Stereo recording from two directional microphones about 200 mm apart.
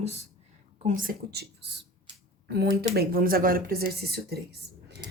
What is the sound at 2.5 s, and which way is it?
Speech, 55° right (ahead or behind).